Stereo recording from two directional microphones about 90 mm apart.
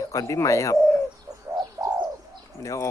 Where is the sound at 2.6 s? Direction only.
35° left (ahead or behind).